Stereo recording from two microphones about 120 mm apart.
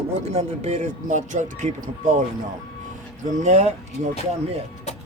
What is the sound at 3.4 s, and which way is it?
Speech, 70° right (ahead or behind).